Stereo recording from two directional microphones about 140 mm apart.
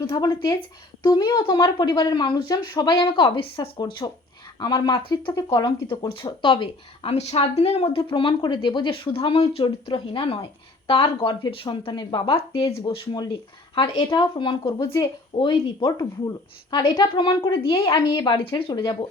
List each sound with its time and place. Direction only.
0.0 s speech: 25° left (ahead or behind)
6.1 s speech: 40° left (ahead or behind)
12.6 s speech: 25° left (ahead or behind)
13.9 s speech: 35° left (ahead or behind)